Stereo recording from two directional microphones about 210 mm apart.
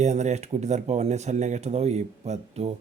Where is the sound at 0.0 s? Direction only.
35° right (ahead or behind).